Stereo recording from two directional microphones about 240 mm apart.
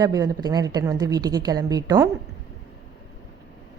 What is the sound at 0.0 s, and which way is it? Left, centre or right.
A woman's voice, centre.